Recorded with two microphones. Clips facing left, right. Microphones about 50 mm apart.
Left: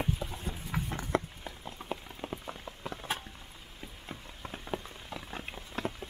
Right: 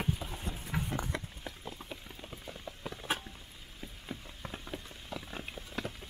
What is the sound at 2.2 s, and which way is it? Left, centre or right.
Rain on surface, left.